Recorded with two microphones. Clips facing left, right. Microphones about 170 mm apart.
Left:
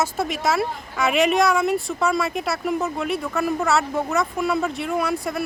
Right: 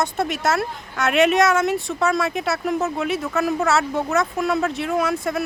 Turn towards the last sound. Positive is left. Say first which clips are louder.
# right 2 dB
turn(degrees=0)  # may be behind; listen again after turning